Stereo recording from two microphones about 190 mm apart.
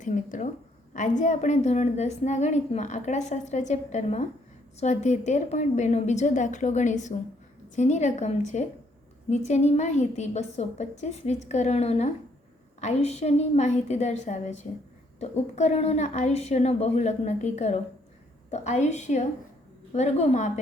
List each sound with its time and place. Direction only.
0.0 s a woman's voice: 40° left (ahead or behind)